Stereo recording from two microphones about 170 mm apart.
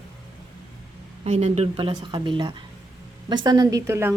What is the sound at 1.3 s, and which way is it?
A woman's voice, 40° right (ahead or behind).